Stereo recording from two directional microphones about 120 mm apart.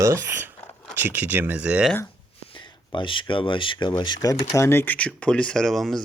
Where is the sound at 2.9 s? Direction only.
45° left (ahead or behind).